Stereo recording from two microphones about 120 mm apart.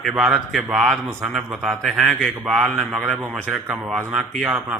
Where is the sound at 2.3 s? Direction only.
10° right (ahead or behind).